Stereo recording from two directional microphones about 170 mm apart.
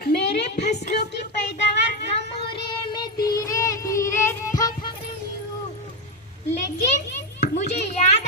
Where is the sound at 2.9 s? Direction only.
25° left (ahead or behind).